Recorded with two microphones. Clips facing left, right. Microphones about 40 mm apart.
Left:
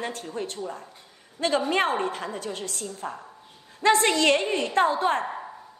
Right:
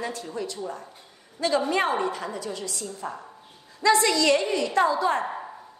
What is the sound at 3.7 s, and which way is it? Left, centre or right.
A woman's voice, left.